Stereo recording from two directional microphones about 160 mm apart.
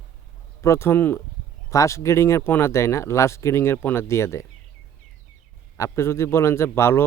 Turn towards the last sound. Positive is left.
turn(degrees=15)  # may be behind; listen again after turning